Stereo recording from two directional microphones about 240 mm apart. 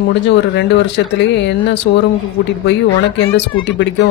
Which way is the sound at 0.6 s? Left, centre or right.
Left.